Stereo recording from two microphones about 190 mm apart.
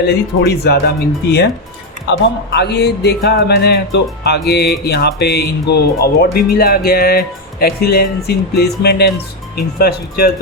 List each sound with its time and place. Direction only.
0.4 s speech: 60° left (ahead or behind)